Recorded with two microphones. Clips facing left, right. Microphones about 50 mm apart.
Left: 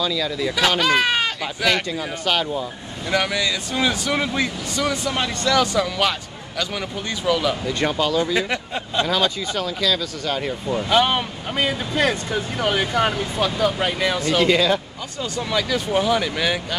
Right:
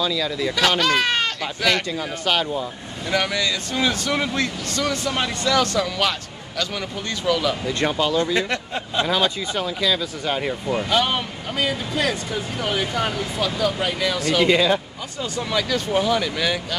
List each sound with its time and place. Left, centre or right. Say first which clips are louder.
0.0 s speech: even; centre
5.1 s speech: left 1 dB; centre
5.6 s a man's voice: left 2 dB; centre
7.6 s speech: even; centre
8.9 s speech: even; centre
10.9 s speech: left 4 dB; left
11.5 s speech: left 1 dB; left
14.4 s speech: right 1 dB; centre
15.5 s a man's voice: left 1 dB; centre